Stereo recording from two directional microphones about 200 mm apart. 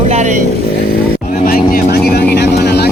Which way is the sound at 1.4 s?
45° left (ahead or behind).